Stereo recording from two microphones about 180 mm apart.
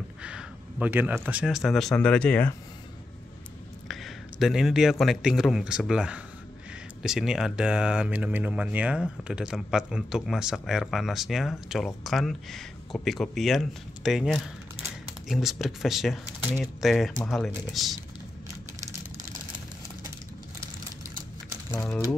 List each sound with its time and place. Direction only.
0.2 s speech: 5° right (ahead or behind)
3.8 s a man's voice: centre (ahead or behind)
21.6 s speech: 15° left (ahead or behind)